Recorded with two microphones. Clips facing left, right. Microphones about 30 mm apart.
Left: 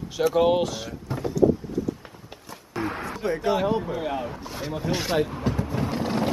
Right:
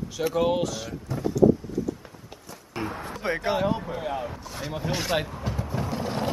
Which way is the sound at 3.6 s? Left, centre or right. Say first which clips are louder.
Left 2 dB; centre.